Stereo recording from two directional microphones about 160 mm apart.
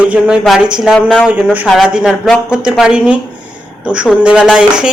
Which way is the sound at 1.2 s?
5° right (ahead or behind).